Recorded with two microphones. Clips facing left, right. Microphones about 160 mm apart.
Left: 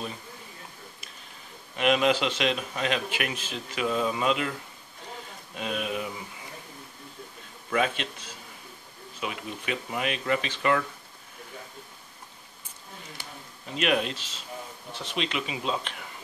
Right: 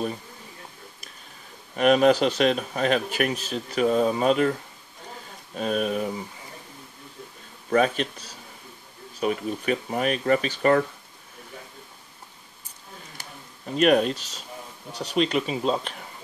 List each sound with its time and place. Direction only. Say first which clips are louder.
1.8 s speech: right 5 dB; 45° right (ahead or behind)
5.6 s speech: right 6 dB; 45° right (ahead or behind)
7.7 s speech: right 6 dB; 40° right (ahead or behind)
13.2 s speech: right 2 dB; 45° right (ahead or behind)